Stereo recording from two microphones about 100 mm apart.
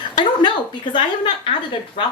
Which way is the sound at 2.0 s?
60° left (ahead or behind).